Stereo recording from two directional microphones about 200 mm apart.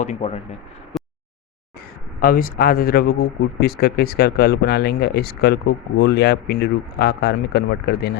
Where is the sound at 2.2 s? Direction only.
45° left (ahead or behind).